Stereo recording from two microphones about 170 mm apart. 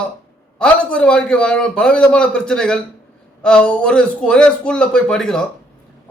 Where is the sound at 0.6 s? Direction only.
5° left (ahead or behind).